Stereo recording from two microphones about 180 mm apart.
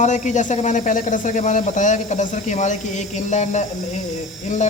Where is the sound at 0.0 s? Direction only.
40° left (ahead or behind).